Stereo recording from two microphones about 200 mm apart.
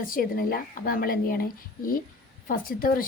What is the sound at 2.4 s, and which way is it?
Speech, 45° left (ahead or behind).